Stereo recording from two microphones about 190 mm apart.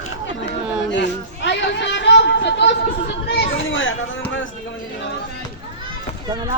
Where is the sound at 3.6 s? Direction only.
90° left.